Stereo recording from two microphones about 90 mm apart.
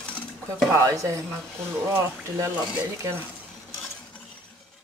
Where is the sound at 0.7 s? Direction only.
40° right (ahead or behind).